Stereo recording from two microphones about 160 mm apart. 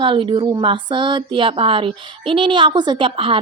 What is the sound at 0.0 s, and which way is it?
Speech, 30° right (ahead or behind).